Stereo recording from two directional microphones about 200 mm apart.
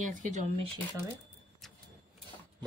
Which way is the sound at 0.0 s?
40° right (ahead or behind).